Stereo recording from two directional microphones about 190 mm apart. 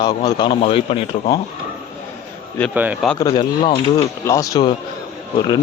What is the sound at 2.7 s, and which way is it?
Speech, 10° right (ahead or behind).